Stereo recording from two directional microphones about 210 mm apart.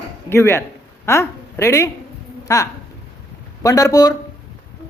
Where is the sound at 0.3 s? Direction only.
10° left (ahead or behind).